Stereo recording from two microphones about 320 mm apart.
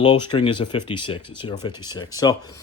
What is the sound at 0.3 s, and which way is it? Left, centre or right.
Speech, centre.